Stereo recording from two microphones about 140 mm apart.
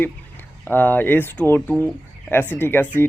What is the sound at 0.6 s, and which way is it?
Speech, 15° left (ahead or behind).